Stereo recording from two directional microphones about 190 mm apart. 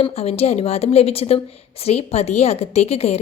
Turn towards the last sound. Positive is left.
turn(degrees=35)  # may be behind; listen again after turning